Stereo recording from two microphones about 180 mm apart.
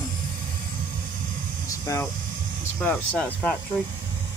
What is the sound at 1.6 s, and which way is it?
Vehicle, 20° left (ahead or behind).